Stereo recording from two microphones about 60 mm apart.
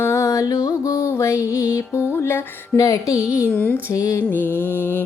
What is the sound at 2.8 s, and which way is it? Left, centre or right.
Speech, left.